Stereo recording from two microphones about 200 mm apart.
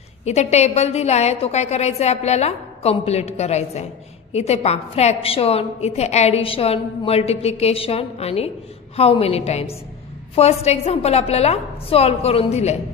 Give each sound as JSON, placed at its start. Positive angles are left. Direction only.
{"t": 0.2, "sound": "a woman's voice", "side_deg": 35}